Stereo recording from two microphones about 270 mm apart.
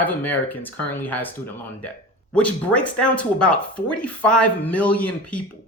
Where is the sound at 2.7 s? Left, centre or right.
Centre.